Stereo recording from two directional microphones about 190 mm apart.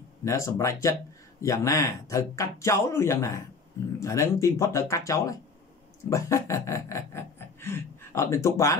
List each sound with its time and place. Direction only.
0.2 s speech: 15° left (ahead or behind)